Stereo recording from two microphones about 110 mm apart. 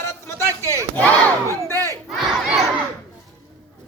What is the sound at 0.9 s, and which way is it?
Battle cry, 15° left (ahead or behind).